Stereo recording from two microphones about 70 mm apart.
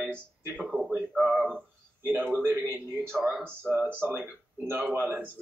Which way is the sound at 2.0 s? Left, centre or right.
Right.